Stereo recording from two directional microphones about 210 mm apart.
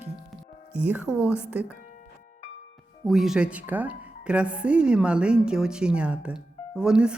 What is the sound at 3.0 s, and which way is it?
Speech, centre (ahead or behind).